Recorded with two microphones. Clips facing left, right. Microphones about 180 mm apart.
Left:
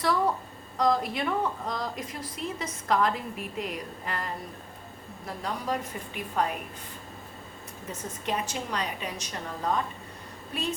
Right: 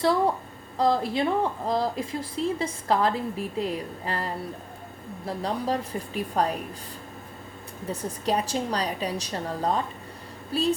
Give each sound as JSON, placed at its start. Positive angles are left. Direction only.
{"t": 0.8, "sound": "a woman's voice", "side_deg": -30}
{"t": 7.9, "sound": "a woman's voice", "side_deg": -35}